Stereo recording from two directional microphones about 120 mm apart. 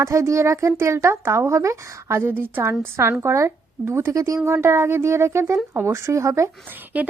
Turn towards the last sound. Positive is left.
turn(degrees=-15)  # may be behind; listen again after turning